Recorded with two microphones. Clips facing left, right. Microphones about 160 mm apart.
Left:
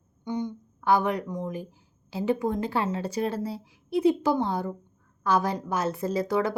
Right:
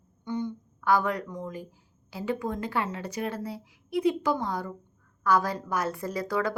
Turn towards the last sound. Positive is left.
turn(degrees=25)  # may be behind; listen again after turning